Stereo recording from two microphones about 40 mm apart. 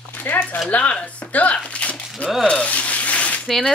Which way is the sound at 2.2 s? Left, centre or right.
Left.